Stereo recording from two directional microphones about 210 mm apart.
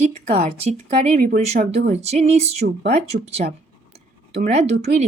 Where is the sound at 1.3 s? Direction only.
40° right (ahead or behind).